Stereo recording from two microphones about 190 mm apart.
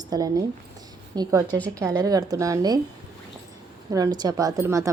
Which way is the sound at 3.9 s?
20° right (ahead or behind).